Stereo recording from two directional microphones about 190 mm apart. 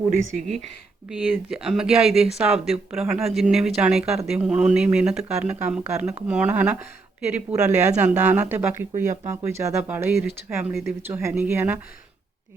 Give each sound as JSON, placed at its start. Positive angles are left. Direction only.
{"t": 0.1, "sound": "speech", "side_deg": -40}
{"t": 1.1, "sound": "speech", "side_deg": -5}
{"t": 7.8, "sound": "speech", "side_deg": -35}
{"t": 8.2, "sound": "speech", "side_deg": -10}
{"t": 8.9, "sound": "speech", "side_deg": -40}
{"t": 9.3, "sound": "speech", "side_deg": -15}